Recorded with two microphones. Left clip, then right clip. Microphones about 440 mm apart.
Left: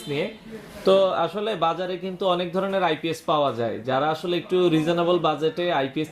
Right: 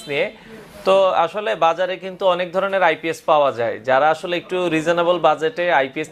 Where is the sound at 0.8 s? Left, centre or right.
Right.